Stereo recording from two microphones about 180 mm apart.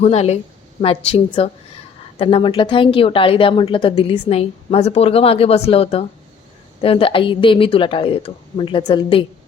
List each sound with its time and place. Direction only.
0.0 s a woman's voice: 35° left (ahead or behind)